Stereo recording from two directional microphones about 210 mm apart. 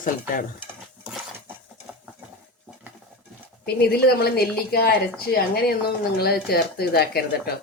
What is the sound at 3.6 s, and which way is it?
Speech, 50° left (ahead or behind).